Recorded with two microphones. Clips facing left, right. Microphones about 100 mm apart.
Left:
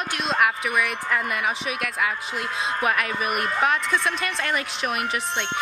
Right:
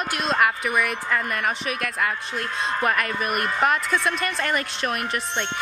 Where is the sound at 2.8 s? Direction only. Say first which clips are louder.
Even; 5° left (ahead or behind).